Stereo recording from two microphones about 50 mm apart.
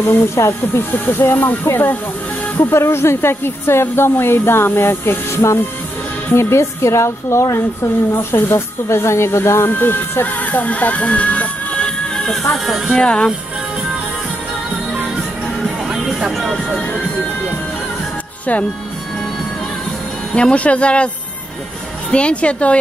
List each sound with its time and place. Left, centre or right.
0.4 s a woman's voice: left
0.9 s speech: left
2.5 s a woman's voice: left
9.7 s speech: left
12.9 s speech: centre
16.1 s music: centre
20.3 s speech: left
22.1 s speech: left